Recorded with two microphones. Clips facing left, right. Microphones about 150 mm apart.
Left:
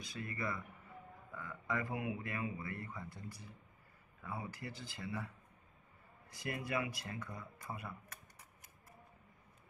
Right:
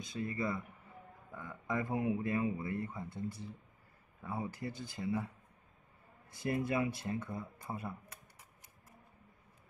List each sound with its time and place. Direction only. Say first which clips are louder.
0.0 s speech: right 5 dB; 25° right (ahead or behind)
6.3 s speech: right 6 dB; 25° right (ahead or behind)